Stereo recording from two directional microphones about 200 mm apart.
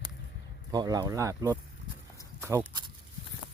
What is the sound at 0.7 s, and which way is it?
Speech, 20° right (ahead or behind).